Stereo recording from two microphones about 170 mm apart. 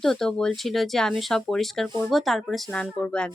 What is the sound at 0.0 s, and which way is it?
Speech, centre (ahead or behind).